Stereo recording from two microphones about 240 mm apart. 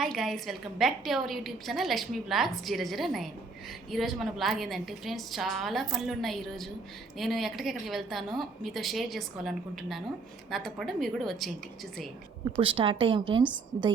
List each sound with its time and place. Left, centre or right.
0.0 s a woman's voice: centre
12.5 s a woman's voice: right